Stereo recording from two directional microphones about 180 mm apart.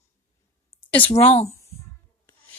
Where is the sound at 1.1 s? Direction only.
35° left (ahead or behind).